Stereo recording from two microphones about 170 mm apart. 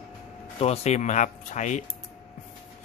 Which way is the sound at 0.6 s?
40° left (ahead or behind).